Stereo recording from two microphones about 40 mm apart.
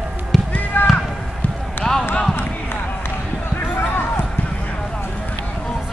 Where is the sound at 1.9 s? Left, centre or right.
Centre.